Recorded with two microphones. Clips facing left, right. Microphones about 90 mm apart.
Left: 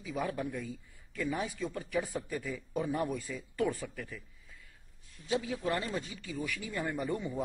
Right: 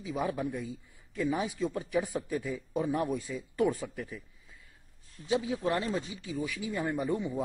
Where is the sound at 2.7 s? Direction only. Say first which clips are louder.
Right 3 dB; 20° right (ahead or behind).